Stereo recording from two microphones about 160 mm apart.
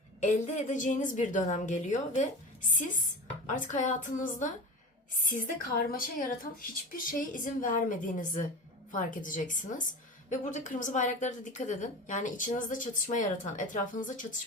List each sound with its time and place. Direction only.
0.2 s a woman's voice: 50° left (ahead or behind)